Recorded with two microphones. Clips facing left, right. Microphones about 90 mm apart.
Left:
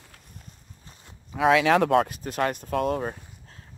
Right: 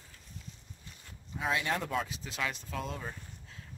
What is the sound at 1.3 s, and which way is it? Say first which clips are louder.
Speech: left 13 dB; 85° left.